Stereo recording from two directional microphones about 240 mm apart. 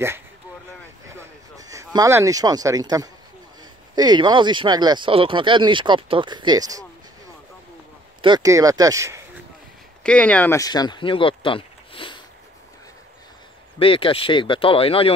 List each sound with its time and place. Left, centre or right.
1.0 s a sound: centre
3.9 s speech: centre
8.2 s speech: centre
10.0 s speech: centre; by 12.2 s left
13.7 s speech: left